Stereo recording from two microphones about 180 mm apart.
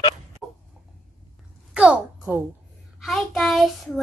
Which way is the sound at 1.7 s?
5° right (ahead or behind).